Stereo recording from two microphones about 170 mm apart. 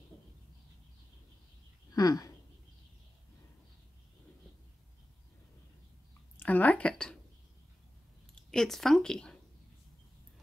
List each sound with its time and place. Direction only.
2.0 s speech: 20° left (ahead or behind)
6.3 s speech: 10° left (ahead or behind)
8.5 s speech: centre (ahead or behind)